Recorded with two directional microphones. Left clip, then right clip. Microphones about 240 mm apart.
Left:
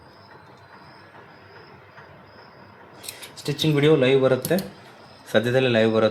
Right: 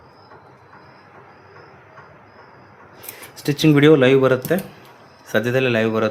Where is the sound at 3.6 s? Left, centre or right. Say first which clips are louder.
Right 6 dB; right.